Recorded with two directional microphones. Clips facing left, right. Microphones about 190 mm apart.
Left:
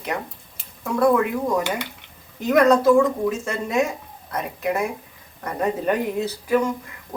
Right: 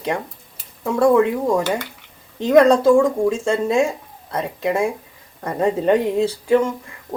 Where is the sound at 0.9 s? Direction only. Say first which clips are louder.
Right 4 dB; 25° right (ahead or behind).